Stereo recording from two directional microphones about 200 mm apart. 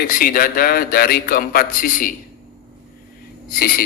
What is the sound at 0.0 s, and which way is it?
A man's voice, 45° left (ahead or behind).